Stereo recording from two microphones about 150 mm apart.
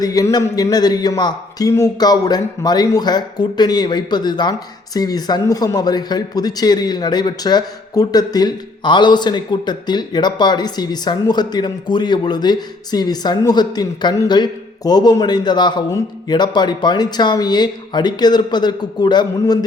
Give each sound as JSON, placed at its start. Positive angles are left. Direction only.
{"t": 0.0, "sound": "a man's voice", "side_deg": 25}